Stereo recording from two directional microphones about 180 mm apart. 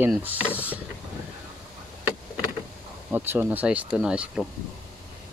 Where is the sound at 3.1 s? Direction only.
10° right (ahead or behind).